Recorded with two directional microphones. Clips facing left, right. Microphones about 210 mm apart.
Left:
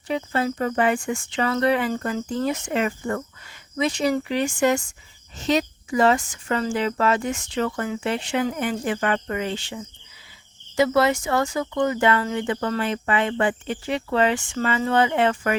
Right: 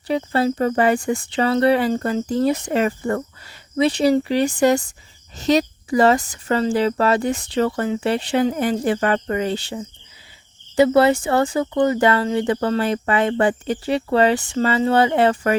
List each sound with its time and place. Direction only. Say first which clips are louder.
0.1 s speech: right 5 dB; 35° right (ahead or behind)